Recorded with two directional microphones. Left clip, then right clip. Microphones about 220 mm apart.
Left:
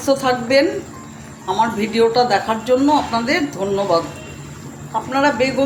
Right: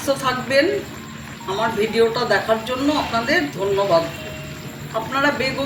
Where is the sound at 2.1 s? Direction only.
45° left (ahead or behind).